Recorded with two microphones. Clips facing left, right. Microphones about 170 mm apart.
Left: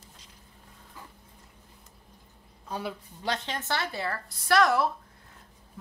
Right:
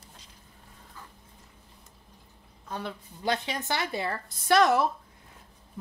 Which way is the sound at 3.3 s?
10° right (ahead or behind).